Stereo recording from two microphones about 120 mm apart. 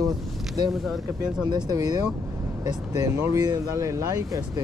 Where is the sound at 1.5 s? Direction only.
30° right (ahead or behind).